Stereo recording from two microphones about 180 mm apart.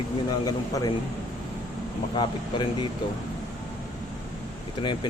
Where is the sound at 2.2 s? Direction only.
25° left (ahead or behind).